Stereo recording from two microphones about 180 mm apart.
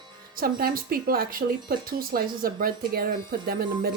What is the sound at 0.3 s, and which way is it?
Speech, 55° right (ahead or behind).